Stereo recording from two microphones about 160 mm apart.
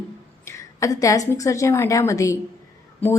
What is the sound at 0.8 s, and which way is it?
A woman's voice, 20° left (ahead or behind).